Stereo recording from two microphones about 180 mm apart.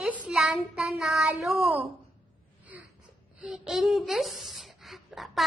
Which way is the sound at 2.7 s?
10° right (ahead or behind).